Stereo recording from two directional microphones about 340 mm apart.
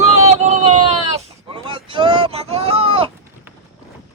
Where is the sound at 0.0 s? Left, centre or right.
Centre.